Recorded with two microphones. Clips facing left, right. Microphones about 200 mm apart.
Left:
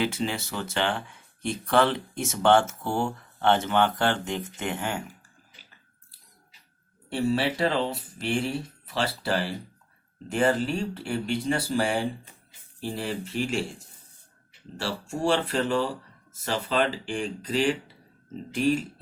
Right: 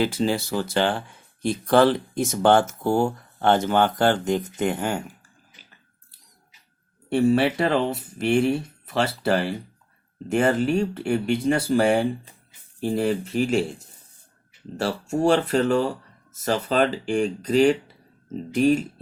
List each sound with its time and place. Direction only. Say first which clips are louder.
0.0 s speech: right 5 dB; 35° right (ahead or behind)
7.1 s speech: right 6 dB; 55° right (ahead or behind)
15.2 s speech: right 5 dB; 45° right (ahead or behind)